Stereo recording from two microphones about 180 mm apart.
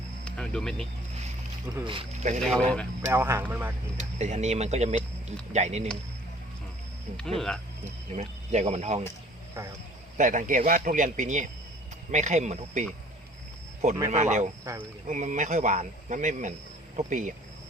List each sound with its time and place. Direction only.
0.3 s a sound: 5° left (ahead or behind)
1.7 s speech: 25° right (ahead or behind)
2.4 s speech: 5° left (ahead or behind)
3.1 s speech: 15° right (ahead or behind)
3.9 s speech: 40° right (ahead or behind)
7.2 s speech: centre (ahead or behind)
7.9 s speech: 40° right (ahead or behind)
10.2 s speech: 45° right (ahead or behind)
14.1 s speech: 40° right (ahead or behind)